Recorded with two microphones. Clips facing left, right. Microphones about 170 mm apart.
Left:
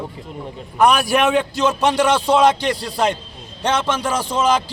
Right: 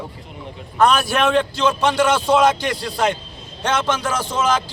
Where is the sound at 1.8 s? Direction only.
35° left (ahead or behind).